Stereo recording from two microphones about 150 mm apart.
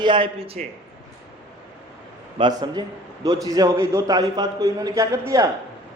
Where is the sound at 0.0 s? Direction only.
35° right (ahead or behind).